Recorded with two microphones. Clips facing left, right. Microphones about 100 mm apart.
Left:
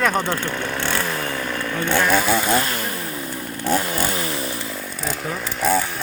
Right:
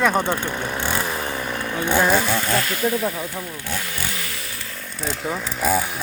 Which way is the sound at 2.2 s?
5° left (ahead or behind).